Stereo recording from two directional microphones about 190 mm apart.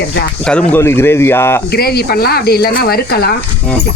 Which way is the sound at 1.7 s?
55° left (ahead or behind).